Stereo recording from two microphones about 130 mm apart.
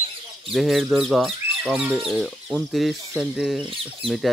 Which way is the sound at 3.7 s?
45° right (ahead or behind).